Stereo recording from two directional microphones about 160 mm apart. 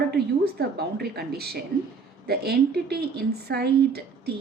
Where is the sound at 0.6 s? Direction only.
80° right.